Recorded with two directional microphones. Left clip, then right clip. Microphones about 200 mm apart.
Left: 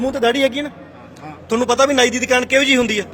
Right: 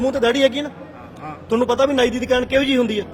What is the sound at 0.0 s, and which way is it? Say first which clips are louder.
A man's voice: even; 10° left (ahead or behind).